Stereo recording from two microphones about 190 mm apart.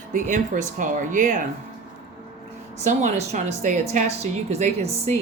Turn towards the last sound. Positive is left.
turn(degrees=-35)  # may be behind; listen again after turning